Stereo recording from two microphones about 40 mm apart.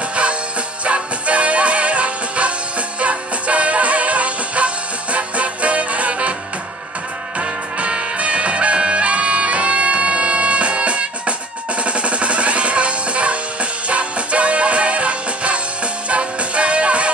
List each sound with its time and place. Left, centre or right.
0.1 s music: right
7.3 s music: right